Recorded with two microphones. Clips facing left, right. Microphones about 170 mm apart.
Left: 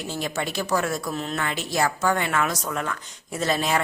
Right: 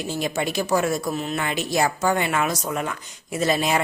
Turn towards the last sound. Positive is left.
turn(degrees=-15)  # may be behind; listen again after turning